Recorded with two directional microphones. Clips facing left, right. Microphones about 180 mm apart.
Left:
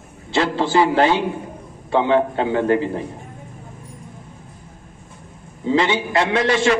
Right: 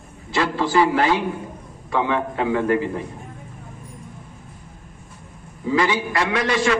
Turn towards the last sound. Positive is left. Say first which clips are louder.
# left 3 dB
turn(degrees=25)  # may be behind; listen again after turning